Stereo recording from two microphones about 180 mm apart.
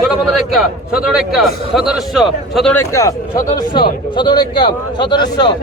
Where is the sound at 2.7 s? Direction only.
15° left (ahead or behind).